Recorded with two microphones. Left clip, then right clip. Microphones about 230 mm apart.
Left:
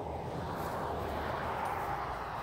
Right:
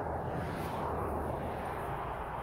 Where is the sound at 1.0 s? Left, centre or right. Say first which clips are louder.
Even; left.